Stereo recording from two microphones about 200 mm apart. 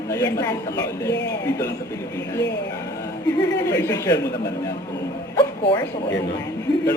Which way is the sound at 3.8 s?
15° left (ahead or behind).